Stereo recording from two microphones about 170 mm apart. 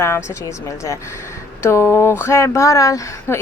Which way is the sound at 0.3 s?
15° left (ahead or behind).